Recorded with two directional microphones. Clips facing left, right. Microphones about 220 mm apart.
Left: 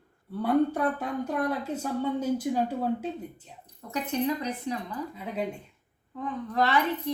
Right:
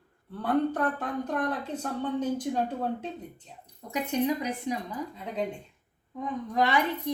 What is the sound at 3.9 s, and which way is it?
Speech, 15° right (ahead or behind).